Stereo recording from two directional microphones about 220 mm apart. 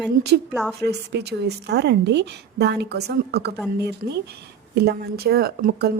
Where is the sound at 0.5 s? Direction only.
5° right (ahead or behind).